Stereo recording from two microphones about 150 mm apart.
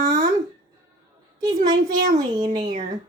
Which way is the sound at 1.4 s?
25° right (ahead or behind).